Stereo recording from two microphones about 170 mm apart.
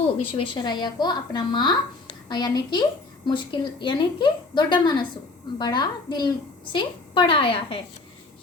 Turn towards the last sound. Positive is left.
turn(degrees=30)  # may be behind; listen again after turning